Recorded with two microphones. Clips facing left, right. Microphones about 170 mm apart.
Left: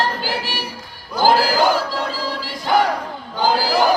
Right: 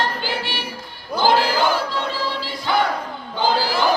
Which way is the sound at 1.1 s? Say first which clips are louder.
Left 2 dB; 40° left (ahead or behind).